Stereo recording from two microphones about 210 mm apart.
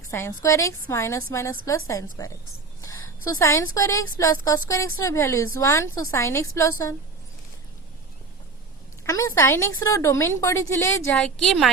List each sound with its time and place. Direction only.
0.1 s a woman's voice: 15° left (ahead or behind)
3.2 s a woman's voice: 15° left (ahead or behind)
9.0 s a woman's voice: 15° left (ahead or behind)
11.1 s a woman's voice: centre (ahead or behind)